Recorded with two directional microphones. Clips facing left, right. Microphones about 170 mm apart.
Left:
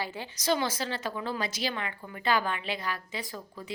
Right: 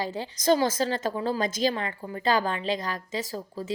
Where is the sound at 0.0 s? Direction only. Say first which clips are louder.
Right 6 dB; 40° right (ahead or behind).